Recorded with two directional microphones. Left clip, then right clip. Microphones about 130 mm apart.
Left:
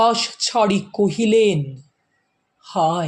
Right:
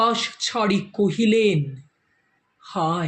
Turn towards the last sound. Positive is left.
turn(degrees=40)  # may be behind; listen again after turning